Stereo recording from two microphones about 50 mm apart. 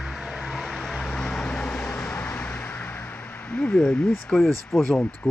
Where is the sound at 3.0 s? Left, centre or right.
Left.